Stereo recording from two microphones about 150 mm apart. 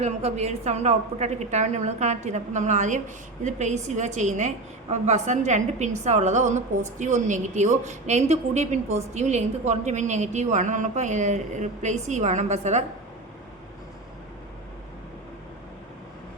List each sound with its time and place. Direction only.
0.0 s a woman's voice: 45° right (ahead or behind)